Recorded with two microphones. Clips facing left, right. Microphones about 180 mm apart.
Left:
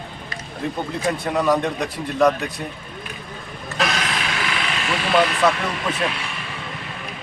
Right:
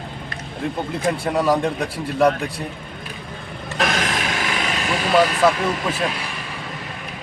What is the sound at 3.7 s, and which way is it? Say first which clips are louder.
Printer: right 2 dB; 50° right (ahead or behind).